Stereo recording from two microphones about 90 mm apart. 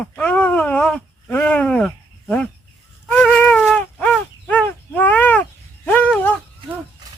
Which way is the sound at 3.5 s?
5° left (ahead or behind).